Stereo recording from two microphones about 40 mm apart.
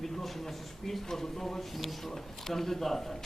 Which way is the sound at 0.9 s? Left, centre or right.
Centre.